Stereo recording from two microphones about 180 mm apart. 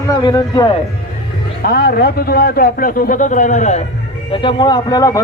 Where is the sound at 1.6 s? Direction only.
60° left (ahead or behind); by 3.9 s 40° left (ahead or behind).